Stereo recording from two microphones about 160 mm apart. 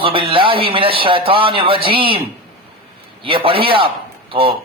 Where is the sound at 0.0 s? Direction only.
35° right (ahead or behind).